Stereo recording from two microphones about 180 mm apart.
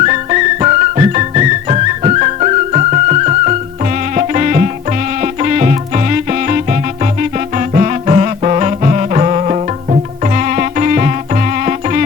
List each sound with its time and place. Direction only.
0.0 s music: 40° right (ahead or behind)